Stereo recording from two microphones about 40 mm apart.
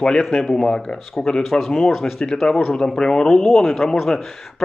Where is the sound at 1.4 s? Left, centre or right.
Centre.